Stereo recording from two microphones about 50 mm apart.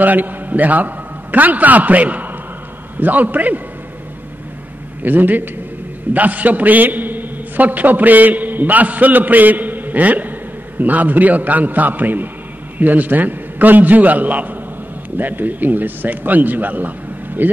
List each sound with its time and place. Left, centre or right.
0.0 s a man's voice: right
5.0 s a man's voice: right